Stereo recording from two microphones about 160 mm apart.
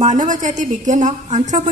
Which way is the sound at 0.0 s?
50° right (ahead or behind).